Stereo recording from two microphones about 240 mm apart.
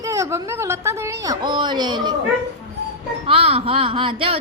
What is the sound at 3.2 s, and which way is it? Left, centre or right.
A woman's voice, right.